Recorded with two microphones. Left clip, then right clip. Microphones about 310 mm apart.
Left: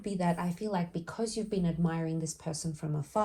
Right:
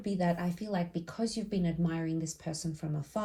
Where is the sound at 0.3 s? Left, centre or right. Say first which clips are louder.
Left 1 dB; centre.